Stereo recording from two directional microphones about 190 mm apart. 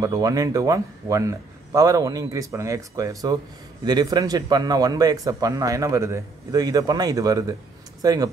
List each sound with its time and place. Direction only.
0.0 s a man's voice: 20° right (ahead or behind)